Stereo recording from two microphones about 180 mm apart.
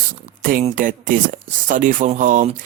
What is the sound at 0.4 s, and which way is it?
Speech, 45° right (ahead or behind).